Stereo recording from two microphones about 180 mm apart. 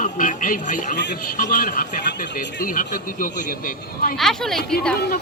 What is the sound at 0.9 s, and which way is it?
Speech, 70° left (ahead or behind).